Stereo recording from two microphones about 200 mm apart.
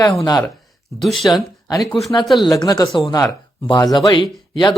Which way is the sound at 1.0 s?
Centre (ahead or behind).